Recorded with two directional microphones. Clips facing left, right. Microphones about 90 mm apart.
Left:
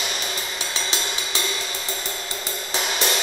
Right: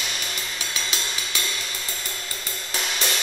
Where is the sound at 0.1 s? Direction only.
30° left (ahead or behind).